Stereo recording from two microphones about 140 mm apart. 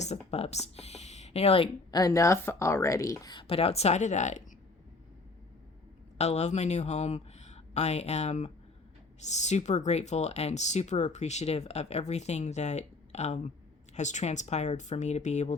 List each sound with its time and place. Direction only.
0.3 s speech: 50° left (ahead or behind)
1.9 s a woman's voice: 25° left (ahead or behind)
3.3 s speech: 45° left (ahead or behind)
6.1 s speech: 50° left (ahead or behind)